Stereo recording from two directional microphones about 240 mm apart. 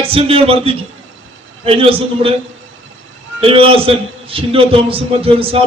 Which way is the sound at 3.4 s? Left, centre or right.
Right.